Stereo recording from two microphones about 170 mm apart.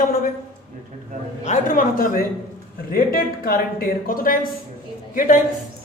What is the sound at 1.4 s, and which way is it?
Speech, 50° left (ahead or behind).